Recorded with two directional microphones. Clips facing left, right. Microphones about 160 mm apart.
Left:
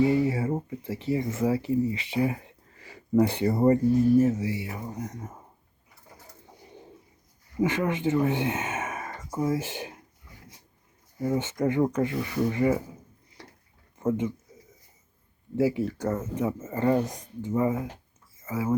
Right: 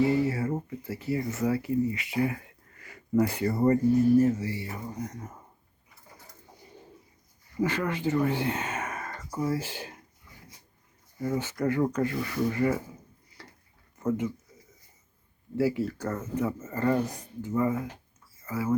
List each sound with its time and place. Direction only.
0.1 s speech: 20° left (ahead or behind)
4.2 s speech: 10° left (ahead or behind)
6.7 s pigeon: 20° left (ahead or behind)
7.6 s speech: 20° left (ahead or behind)
9.0 s a sound: 15° left (ahead or behind)
11.2 s speech: 20° left (ahead or behind)
14.1 s speech: 20° left (ahead or behind)
15.5 s speech: 20° left (ahead or behind)